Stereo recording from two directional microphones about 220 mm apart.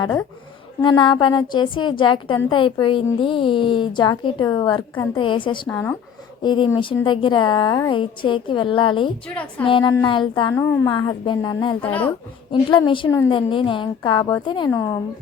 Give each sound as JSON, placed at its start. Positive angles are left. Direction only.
{"t": 0.0, "sound": "speech", "side_deg": 10}
{"t": 0.8, "sound": "a woman's voice", "side_deg": 20}
{"t": 6.4, "sound": "a woman's voice", "side_deg": 20}